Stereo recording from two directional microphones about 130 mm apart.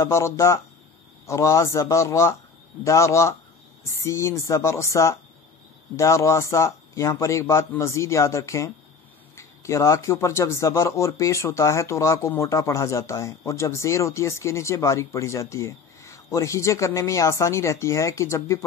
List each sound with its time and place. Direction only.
0.0 s speech: 20° left (ahead or behind)